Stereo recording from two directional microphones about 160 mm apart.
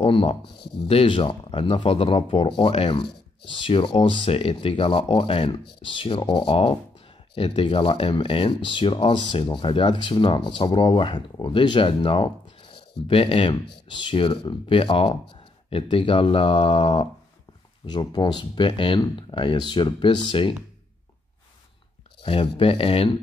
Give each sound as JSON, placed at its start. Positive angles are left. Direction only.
{"t": 0.0, "sound": "speech", "side_deg": 35}
{"t": 0.6, "sound": "speech", "side_deg": 90}
{"t": 0.8, "sound": "speech", "side_deg": 35}
{"t": 22.2, "sound": "speech", "side_deg": 35}